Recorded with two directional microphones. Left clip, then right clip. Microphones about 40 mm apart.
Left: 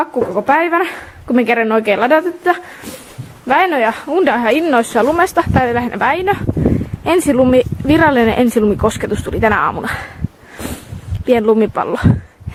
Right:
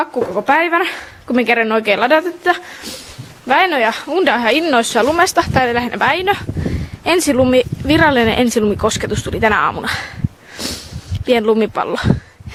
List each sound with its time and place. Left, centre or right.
0.1 s speech: right
0.6 s speech: right
4.8 s speech: right
11.3 s speech: right